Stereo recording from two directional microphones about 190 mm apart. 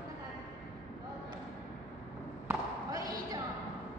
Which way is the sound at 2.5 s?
20° right (ahead or behind).